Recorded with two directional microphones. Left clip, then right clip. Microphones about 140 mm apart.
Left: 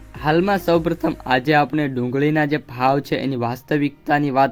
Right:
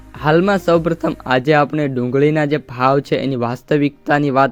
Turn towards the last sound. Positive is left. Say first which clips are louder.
# right 3 dB
turn(degrees=-25)  # may be behind; listen again after turning